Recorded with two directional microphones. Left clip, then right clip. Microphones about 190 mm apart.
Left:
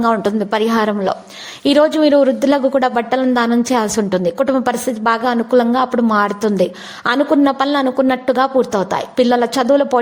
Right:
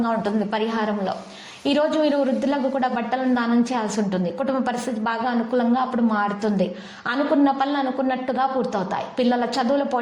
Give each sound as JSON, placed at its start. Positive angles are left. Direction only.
{"t": 0.0, "sound": "a woman's voice", "side_deg": 45}